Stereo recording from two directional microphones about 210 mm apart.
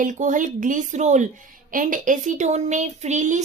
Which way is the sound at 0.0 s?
35° right (ahead or behind).